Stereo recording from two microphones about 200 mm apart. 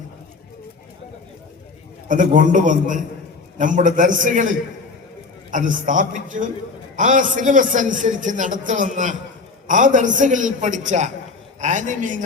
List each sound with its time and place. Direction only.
2.0 s a man's voice: 40° right (ahead or behind)